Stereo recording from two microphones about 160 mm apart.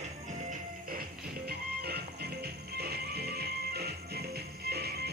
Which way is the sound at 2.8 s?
85° right.